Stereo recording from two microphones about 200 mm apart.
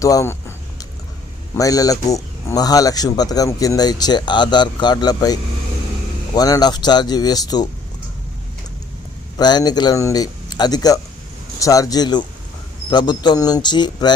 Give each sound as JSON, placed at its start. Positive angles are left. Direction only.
{"t": 0.0, "sound": "speech", "side_deg": 15}
{"t": 1.5, "sound": "speech", "side_deg": 15}
{"t": 9.4, "sound": "speech", "side_deg": 20}